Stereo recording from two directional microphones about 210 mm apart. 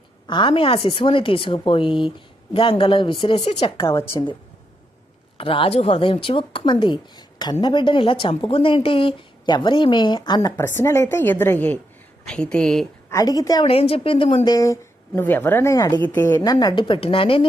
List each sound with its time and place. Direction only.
0.3 s a woman's voice: 25° left (ahead or behind)
5.4 s a woman's voice: 25° left (ahead or behind); by 12.8 s 5° left (ahead or behind)
13.1 s a woman's voice: 15° left (ahead or behind)
14.5 s a woman's voice: 15° left (ahead or behind)